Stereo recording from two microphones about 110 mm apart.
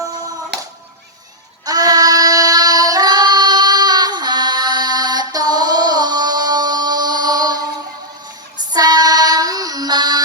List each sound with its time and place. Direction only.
1.6 s child singing: 35° right (ahead or behind)
8.7 s female singing: 35° right (ahead or behind)